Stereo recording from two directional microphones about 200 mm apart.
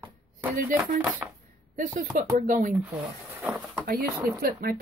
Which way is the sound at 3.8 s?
50° right (ahead or behind).